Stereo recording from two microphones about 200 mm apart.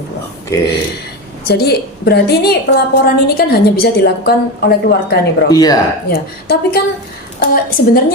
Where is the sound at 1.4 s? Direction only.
55° left (ahead or behind).